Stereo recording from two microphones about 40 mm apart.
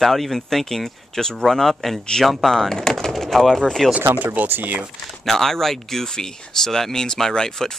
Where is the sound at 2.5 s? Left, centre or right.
Centre.